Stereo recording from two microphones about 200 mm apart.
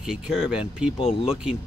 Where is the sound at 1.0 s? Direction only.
30° left (ahead or behind).